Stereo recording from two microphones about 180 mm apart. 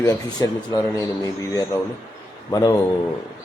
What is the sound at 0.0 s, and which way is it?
Speech, 20° left (ahead or behind).